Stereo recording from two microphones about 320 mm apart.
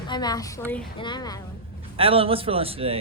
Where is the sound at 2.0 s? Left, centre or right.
Centre.